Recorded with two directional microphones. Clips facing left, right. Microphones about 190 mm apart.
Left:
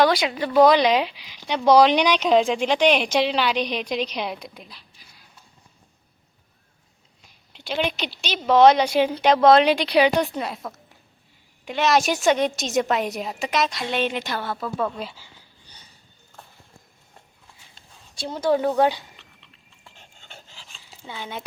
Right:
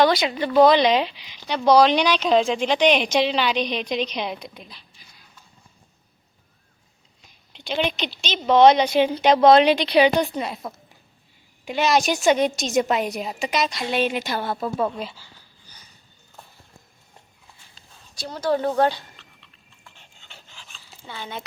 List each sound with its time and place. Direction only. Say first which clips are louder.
0.0 s speech: right 1 dB; 10° left (ahead or behind)
7.5 s a woman's voice: right 1 dB; 5° left (ahead or behind)
11.6 s a woman's voice: even; centre (ahead or behind); by 14.9 s 20° right (ahead or behind)
18.2 s a woman's voice: left 2 dB; 25° left (ahead or behind)
18.5 s speech: even; 10° left (ahead or behind)
19.8 s a sound: left 2 dB; 45° left (ahead or behind)
21.1 s speech: even; 10° left (ahead or behind)